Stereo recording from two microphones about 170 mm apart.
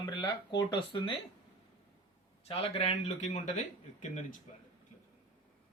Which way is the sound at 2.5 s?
35° left (ahead or behind).